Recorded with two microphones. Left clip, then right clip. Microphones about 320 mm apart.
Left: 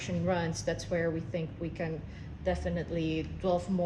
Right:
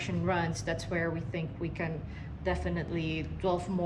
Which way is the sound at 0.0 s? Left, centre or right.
Right.